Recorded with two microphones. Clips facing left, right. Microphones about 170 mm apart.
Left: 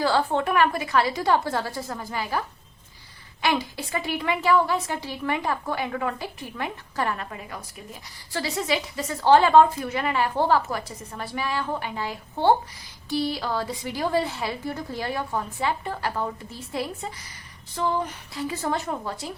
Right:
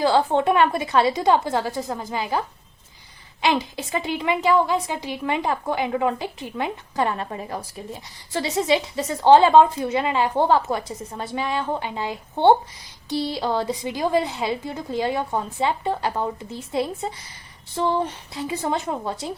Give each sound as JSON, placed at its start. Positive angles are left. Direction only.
{"t": 0.0, "sound": "a woman's voice", "side_deg": -20}
{"t": 3.4, "sound": "a woman's voice", "side_deg": -20}
{"t": 8.3, "sound": "a woman's voice", "side_deg": -20}